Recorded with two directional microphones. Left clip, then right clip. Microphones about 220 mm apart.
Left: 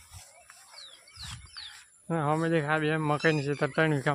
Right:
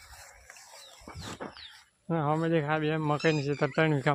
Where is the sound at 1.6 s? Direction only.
5° right (ahead or behind).